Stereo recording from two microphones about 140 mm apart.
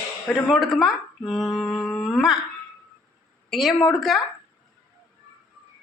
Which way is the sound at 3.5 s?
Centre (ahead or behind).